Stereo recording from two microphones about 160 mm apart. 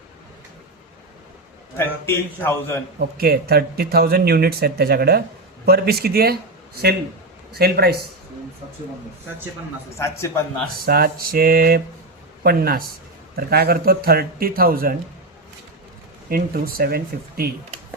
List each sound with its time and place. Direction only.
1.7 s a man's voice: 15° left (ahead or behind)
3.2 s speech: 70° right (ahead or behind)
7.5 s speech: 80° right
10.0 s a man's voice: 15° left (ahead or behind)
10.8 s speech: 70° right (ahead or behind)
16.3 s speech: 70° right (ahead or behind)